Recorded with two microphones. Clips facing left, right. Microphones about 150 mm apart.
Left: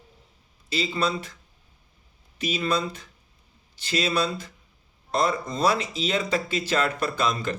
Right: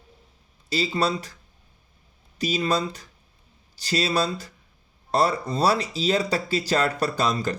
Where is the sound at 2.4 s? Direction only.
35° right (ahead or behind).